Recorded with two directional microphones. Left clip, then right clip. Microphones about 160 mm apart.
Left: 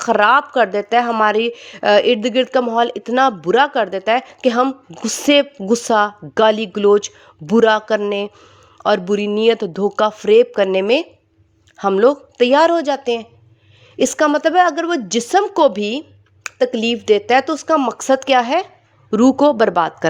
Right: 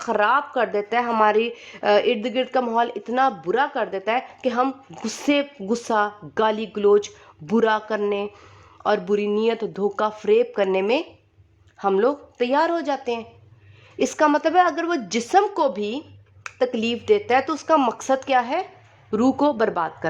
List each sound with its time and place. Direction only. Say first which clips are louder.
0.0 s a woman's voice: left 7 dB; 40° left (ahead or behind); by 15.5 s 20° left (ahead or behind)
15.5 s a sound: left 8 dB; 35° left (ahead or behind)
16.6 s a woman's voice: left 6 dB; 20° left (ahead or behind)